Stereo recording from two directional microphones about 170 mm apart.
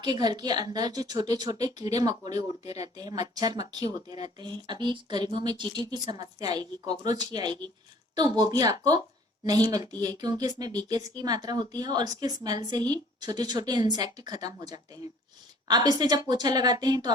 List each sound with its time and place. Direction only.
0.0 s a woman's voice: 25° right (ahead or behind)